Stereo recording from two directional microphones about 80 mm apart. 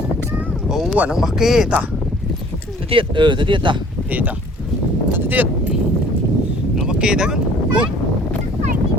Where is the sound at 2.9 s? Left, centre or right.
Right.